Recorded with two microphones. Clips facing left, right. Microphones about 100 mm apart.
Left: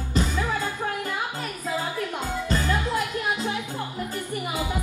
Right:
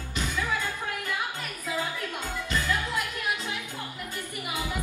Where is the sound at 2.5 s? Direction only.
35° left (ahead or behind).